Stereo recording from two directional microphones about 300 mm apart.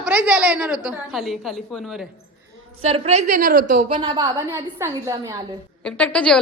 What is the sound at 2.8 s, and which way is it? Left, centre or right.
A woman's voice, centre.